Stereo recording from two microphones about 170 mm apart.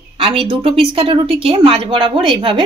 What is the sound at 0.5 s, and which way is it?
Speech, 30° right (ahead or behind).